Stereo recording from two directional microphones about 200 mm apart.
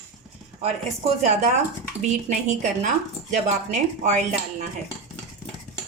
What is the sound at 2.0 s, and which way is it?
A woman's voice, 35° right (ahead or behind).